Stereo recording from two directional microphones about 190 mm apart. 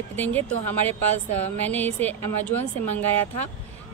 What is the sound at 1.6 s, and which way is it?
Speech, 10° left (ahead or behind).